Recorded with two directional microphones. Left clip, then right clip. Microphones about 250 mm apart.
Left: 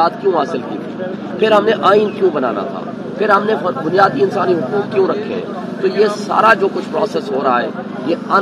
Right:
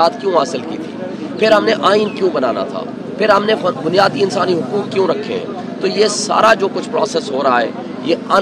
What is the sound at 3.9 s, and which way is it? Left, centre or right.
Speech, centre.